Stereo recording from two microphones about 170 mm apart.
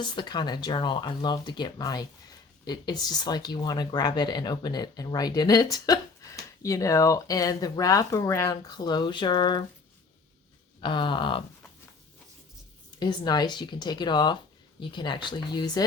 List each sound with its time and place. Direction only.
0.0 s speech: 25° left (ahead or behind)
10.8 s speech: 30° left (ahead or behind)
13.0 s speech: 25° left (ahead or behind)